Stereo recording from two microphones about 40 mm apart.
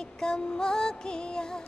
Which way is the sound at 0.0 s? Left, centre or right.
Centre.